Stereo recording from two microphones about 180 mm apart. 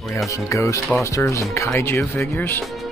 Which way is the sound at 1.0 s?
15° left (ahead or behind).